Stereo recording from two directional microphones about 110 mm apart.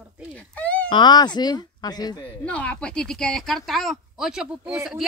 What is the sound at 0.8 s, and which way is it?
Speech, 45° left (ahead or behind).